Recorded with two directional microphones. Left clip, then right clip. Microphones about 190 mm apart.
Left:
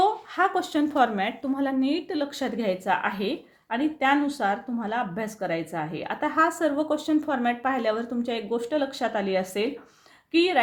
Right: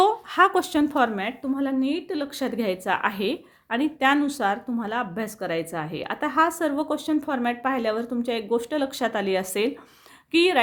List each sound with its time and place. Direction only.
0.0 s a woman's voice: 35° right (ahead or behind)